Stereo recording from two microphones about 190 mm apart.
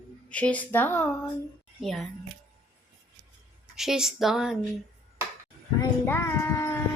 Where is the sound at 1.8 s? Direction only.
Centre (ahead or behind).